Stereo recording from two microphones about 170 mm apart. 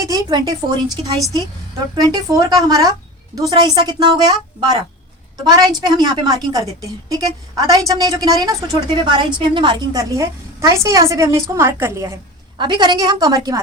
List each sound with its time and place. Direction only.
0.0 s a woman's voice: 20° right (ahead or behind)
12.5 s a woman's voice: 25° right (ahead or behind)